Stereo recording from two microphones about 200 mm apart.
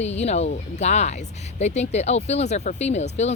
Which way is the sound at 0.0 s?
35° left (ahead or behind).